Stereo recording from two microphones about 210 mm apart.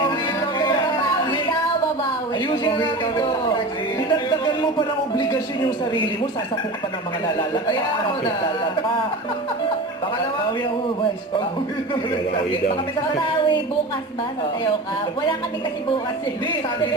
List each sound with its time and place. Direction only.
1.2 s music: 20° left (ahead or behind)
2.7 s a sound: 20° left (ahead or behind)
4.1 s music: 20° left (ahead or behind)